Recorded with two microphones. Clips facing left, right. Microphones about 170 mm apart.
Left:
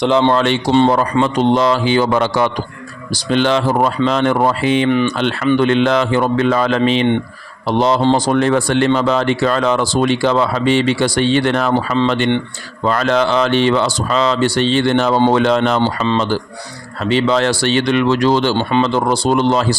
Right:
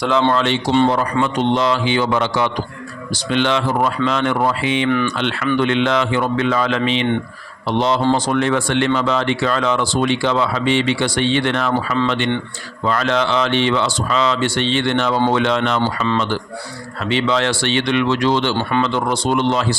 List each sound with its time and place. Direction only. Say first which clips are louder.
0.0 s speech: left 3 dB; 20° left (ahead or behind)
0.3 s a man's voice: left 3 dB; 50° left (ahead or behind)
0.7 s speech: left 3 dB; 35° left (ahead or behind)
4.9 s speech: left 3 dB; 20° left (ahead or behind)
5.1 s speech: left 4 dB; 40° left (ahead or behind)
16.0 s speech: left 3 dB; 30° left (ahead or behind)
17.0 s speech: left 4 dB; 40° left (ahead or behind)
18.5 s speech: left 3 dB; 20° left (ahead or behind)
18.9 s speech: left 4 dB; 35° left (ahead or behind)